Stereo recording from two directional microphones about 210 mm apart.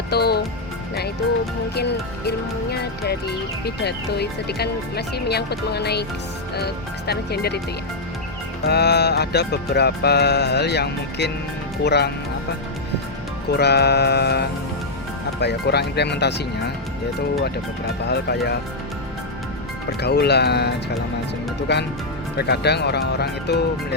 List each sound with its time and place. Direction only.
0.1 s music: 50° left (ahead or behind)
1.7 s speech: 50° left (ahead or behind)
8.6 s speech: 50° left (ahead or behind)
13.6 s speech: 50° left (ahead or behind)
18.1 s speech: 50° left (ahead or behind)
20.0 s speech: 50° left (ahead or behind)